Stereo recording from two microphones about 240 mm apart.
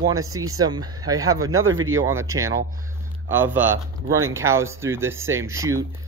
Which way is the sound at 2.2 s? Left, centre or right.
Centre.